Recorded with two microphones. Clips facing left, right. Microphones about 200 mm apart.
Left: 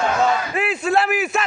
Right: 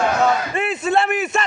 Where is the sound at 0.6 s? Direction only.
Centre (ahead or behind).